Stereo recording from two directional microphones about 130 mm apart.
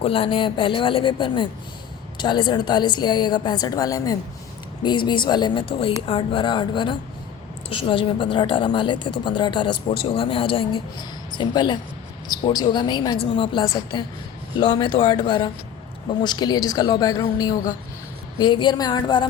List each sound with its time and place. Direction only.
0.0 s a woman's voice: 45° left (ahead or behind)